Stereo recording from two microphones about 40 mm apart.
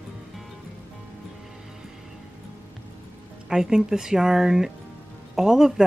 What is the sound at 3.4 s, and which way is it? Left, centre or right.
Speech, centre.